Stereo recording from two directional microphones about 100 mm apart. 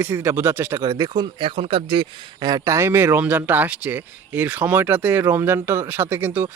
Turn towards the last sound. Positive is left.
turn(degrees=-20)  # may be behind; listen again after turning